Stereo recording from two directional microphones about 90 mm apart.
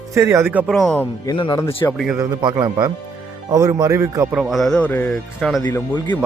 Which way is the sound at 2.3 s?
55° right (ahead or behind).